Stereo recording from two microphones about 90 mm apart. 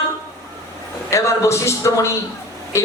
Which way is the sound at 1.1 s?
35° left (ahead or behind).